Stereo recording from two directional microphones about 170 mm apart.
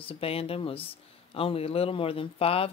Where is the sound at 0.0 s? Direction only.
35° left (ahead or behind).